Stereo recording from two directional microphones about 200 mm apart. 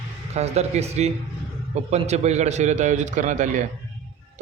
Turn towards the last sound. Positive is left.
turn(degrees=-40)  # may be behind; listen again after turning